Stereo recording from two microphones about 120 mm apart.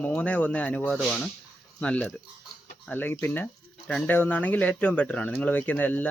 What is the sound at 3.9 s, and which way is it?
Speech, 5° left (ahead or behind).